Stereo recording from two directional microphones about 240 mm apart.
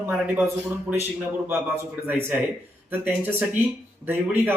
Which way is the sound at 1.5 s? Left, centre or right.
Centre.